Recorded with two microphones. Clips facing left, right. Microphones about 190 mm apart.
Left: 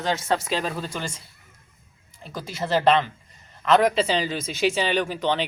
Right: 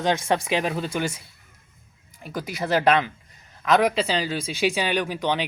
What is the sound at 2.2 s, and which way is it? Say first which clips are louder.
Speech: right 2 dB; 15° right (ahead or behind).